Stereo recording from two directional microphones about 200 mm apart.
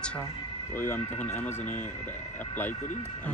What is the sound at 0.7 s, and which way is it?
Speech, 10° left (ahead or behind).